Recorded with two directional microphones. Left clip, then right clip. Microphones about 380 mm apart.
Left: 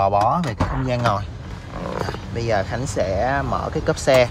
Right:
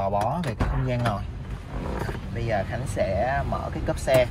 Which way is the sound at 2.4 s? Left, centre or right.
Centre.